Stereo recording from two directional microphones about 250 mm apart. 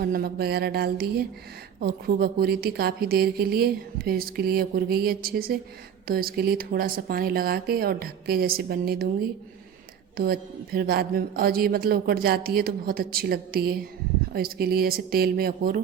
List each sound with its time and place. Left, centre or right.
0.0 s a woman's voice: right
10.2 s a woman's voice: right